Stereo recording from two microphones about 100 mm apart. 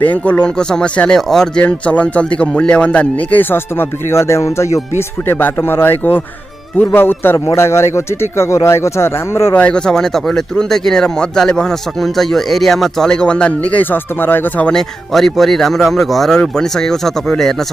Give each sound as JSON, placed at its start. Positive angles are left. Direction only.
{"t": 0.0, "sound": "speech", "side_deg": 15}
{"t": 9.7, "sound": "speech", "side_deg": 10}
{"t": 14.7, "sound": "speech", "side_deg": 5}